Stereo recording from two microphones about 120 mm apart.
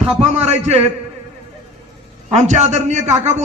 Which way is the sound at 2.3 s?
75° right (ahead or behind).